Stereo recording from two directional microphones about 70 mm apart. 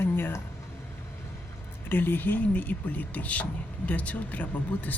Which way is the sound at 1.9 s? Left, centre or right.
Left.